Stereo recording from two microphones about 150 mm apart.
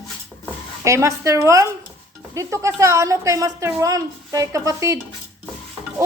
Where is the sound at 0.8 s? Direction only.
20° right (ahead or behind).